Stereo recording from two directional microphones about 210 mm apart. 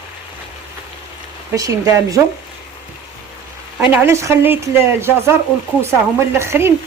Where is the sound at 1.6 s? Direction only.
15° right (ahead or behind).